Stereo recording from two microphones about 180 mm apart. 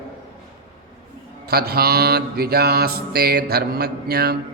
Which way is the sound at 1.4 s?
60° right (ahead or behind).